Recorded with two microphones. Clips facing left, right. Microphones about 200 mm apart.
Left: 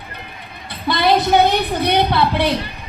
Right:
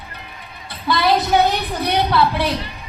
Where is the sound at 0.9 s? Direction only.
25° left (ahead or behind).